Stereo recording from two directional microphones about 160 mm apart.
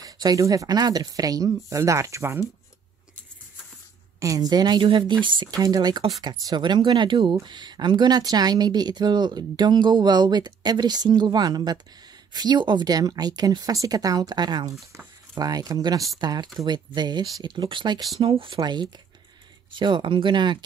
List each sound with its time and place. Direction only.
0.0 s speech: 25° right (ahead or behind)
4.2 s speech: 25° right (ahead or behind)